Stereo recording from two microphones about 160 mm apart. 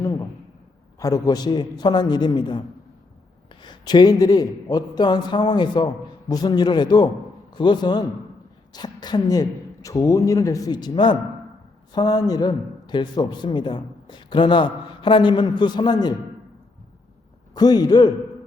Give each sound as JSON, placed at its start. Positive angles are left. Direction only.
{"t": 0.0, "sound": "a sound", "side_deg": 20}
{"t": 0.9, "sound": "a man's voice", "side_deg": 20}
{"t": 17.5, "sound": "a man's voice", "side_deg": 25}